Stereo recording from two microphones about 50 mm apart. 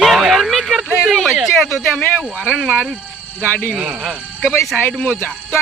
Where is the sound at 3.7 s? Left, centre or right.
Centre.